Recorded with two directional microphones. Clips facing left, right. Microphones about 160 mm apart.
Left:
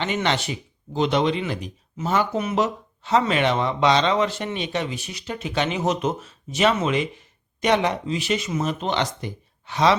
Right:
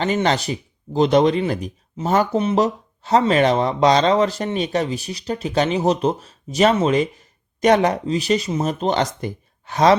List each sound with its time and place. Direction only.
0.0 s speech: 40° right (ahead or behind)